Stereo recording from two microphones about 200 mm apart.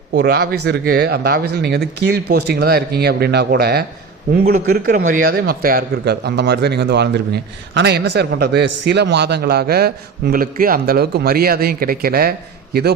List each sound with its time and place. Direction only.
0.1 s a man's voice: 50° right (ahead or behind)